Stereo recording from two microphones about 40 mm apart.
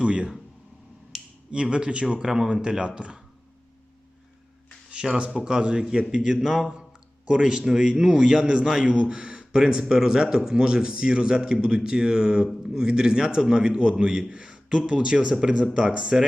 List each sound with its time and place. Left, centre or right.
0.0 s speech: right
1.1 s finger snapping: centre
1.5 s speech: right
5.0 s speech: right
6.4 s a man's voice: centre
9.0 s a sound: right
9.6 s speech: centre